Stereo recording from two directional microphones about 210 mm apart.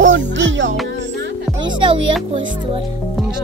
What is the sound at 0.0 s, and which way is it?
Music, 60° right (ahead or behind).